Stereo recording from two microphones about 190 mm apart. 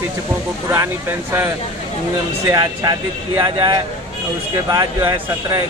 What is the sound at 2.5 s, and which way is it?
Speech, 20° right (ahead or behind).